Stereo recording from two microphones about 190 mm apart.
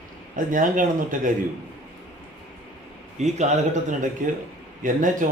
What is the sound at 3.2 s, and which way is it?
A man's voice, 35° right (ahead or behind).